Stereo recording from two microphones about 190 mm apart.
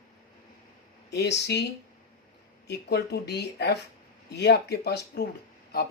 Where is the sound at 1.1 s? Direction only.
60° left (ahead or behind).